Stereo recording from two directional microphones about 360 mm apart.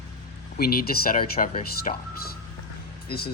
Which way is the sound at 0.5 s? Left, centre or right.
Left.